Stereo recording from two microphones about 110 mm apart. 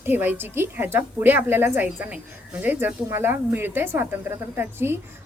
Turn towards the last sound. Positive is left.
turn(degrees=-20)  # may be behind; listen again after turning